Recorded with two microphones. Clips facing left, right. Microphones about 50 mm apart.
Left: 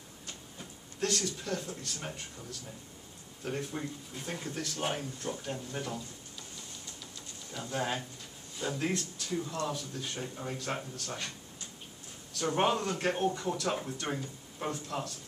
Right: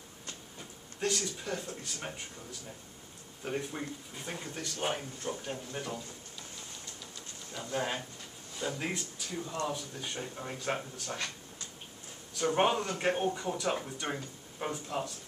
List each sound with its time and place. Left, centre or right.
0.9 s speech: centre
3.4 s speech: centre
5.3 s speech: centre
5.7 s speech: centre
7.5 s speech: centre
12.4 s speech: centre